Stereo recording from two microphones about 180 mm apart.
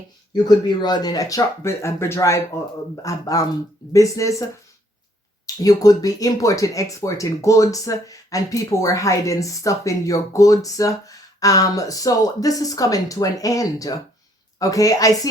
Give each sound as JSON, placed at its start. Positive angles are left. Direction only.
{"t": 0.3, "sound": "speech", "side_deg": 25}
{"t": 5.6, "sound": "speech", "side_deg": 20}